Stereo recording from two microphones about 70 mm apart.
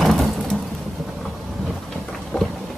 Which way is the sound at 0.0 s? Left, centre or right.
Centre.